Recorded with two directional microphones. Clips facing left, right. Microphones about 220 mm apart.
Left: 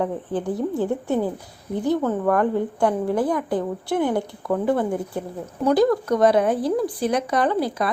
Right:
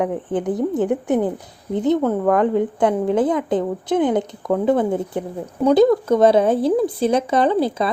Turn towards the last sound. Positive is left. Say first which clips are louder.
# right 4 dB
turn(degrees=-25)  # may be behind; listen again after turning